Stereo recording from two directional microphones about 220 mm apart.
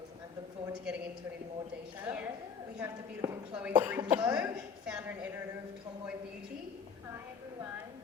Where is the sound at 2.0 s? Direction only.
5° right (ahead or behind).